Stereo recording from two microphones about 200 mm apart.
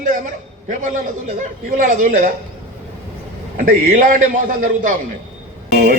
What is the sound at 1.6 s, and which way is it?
Speech, 40° right (ahead or behind).